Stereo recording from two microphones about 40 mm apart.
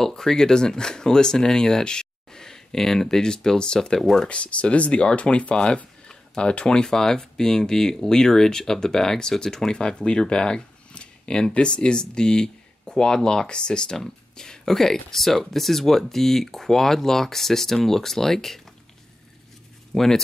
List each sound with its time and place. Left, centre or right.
0.0 s speech: centre
4.3 s speech: left; by 18.6 s centre
19.9 s speech: centre